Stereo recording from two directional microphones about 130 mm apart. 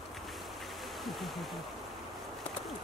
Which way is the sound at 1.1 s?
Centre (ahead or behind).